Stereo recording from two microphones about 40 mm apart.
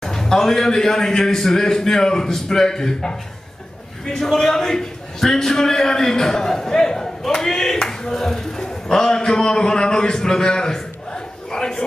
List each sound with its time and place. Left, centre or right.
0.0 s a man's voice: centre